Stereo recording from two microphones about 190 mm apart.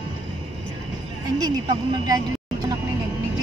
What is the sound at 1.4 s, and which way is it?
Speech, 20° right (ahead or behind).